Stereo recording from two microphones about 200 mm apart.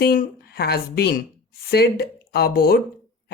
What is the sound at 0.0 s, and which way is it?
Speech, 50° left (ahead or behind).